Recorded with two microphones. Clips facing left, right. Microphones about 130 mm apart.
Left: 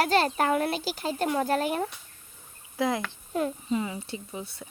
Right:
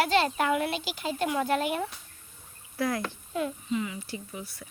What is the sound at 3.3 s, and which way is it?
Speech, 35° left (ahead or behind).